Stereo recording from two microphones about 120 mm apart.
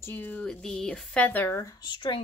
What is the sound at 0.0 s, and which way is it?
Speech, 15° left (ahead or behind).